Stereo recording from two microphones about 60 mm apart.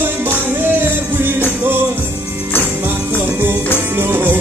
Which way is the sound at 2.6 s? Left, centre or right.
Right.